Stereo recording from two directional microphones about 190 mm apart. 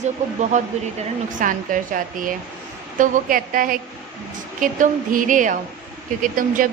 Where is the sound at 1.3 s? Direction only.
45° right (ahead or behind).